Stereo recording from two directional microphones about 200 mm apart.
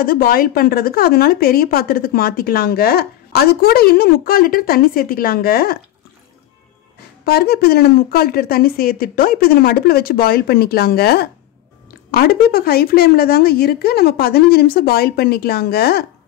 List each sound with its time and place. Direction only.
0.0 s speech: 45° left (ahead or behind)
7.2 s speech: 50° left (ahead or behind)